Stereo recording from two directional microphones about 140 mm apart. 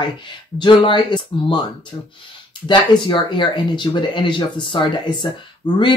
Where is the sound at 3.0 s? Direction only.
35° left (ahead or behind).